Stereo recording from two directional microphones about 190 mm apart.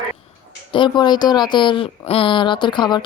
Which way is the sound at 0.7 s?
25° left (ahead or behind).